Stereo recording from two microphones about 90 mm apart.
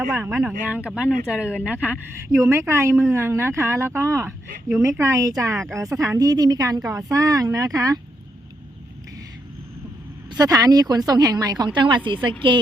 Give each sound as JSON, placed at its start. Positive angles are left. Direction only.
{"t": 0.1, "sound": "speech", "side_deg": -20}
{"t": 2.4, "sound": "a woman's voice", "side_deg": -30}
{"t": 10.3, "sound": "speech", "side_deg": -45}